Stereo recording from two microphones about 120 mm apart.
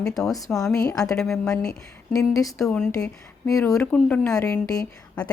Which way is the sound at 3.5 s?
25° left (ahead or behind).